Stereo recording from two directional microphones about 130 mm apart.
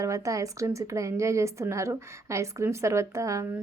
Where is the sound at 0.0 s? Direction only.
25° right (ahead or behind).